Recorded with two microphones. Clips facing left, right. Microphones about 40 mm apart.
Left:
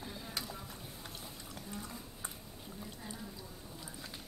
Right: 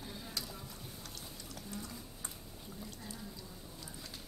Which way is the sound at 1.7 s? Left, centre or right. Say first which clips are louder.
Even; centre.